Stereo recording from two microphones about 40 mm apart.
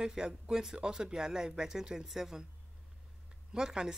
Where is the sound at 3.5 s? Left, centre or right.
Centre.